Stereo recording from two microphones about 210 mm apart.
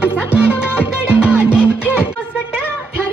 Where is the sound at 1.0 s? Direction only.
5° right (ahead or behind).